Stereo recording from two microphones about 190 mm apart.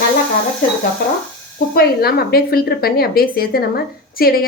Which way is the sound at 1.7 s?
55° left (ahead or behind).